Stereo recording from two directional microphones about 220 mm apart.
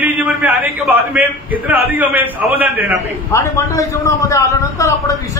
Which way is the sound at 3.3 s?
10° left (ahead or behind).